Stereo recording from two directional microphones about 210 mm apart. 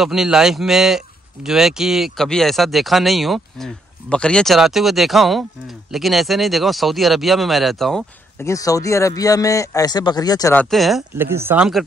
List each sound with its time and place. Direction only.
0.0 s speech: centre (ahead or behind)
8.4 s a man's voice: 15° left (ahead or behind); by 11.8 s 5° right (ahead or behind)